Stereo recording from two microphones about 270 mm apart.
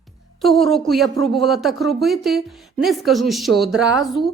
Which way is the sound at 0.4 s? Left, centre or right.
Centre.